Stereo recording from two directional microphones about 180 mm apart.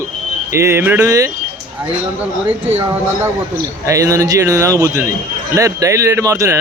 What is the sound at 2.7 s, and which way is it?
A man's voice, 10° right (ahead or behind).